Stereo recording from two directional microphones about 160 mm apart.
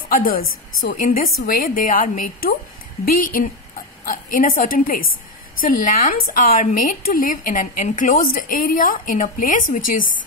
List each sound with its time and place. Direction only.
0.1 s a woman's voice: 60° left (ahead or behind)